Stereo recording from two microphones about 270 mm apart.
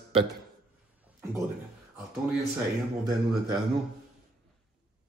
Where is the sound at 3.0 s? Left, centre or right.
Centre.